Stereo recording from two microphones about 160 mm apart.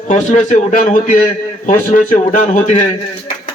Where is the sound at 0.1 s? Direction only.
50° left (ahead or behind).